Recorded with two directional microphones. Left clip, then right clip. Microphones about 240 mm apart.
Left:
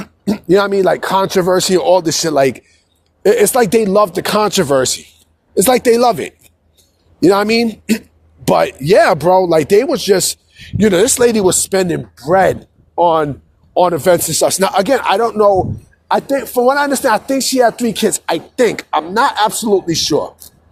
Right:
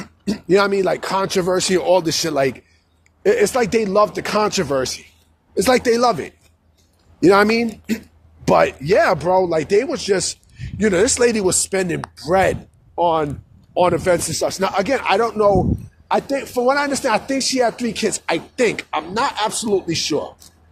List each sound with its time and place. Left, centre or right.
0.3 s speech: left
2.4 s speech: left
7.2 s speech: left
12.1 s speech: centre
13.0 s speech: left